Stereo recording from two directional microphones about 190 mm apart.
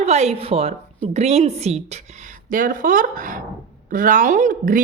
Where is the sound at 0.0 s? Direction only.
35° right (ahead or behind).